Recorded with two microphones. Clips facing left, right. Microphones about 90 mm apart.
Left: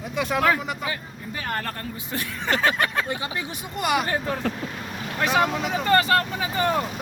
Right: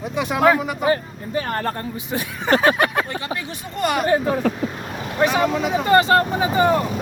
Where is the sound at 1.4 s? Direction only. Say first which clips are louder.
Right 6 dB; 35° right (ahead or behind).